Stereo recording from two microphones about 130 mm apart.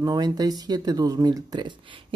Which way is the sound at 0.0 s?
30° right (ahead or behind).